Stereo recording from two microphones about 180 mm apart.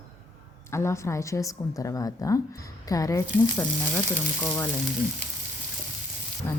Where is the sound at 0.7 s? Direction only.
15° left (ahead or behind).